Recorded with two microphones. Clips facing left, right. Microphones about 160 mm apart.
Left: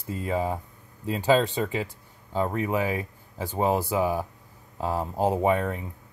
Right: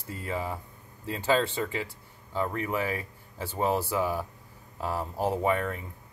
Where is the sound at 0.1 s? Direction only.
20° left (ahead or behind).